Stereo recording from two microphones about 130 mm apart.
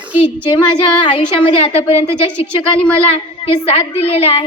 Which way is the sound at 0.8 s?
40° left (ahead or behind).